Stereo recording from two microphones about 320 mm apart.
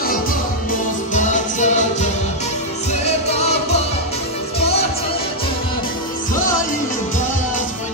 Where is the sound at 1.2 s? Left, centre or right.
Left.